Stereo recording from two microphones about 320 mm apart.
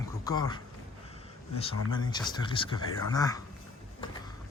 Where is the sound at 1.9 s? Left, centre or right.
Centre.